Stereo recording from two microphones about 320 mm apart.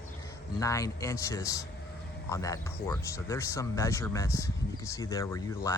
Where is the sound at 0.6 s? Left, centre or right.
Centre.